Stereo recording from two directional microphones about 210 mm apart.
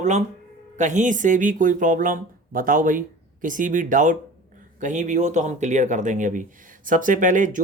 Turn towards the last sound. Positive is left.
turn(degrees=-40)  # may be behind; listen again after turning